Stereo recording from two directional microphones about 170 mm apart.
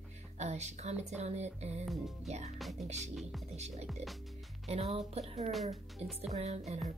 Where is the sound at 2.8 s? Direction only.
40° right (ahead or behind).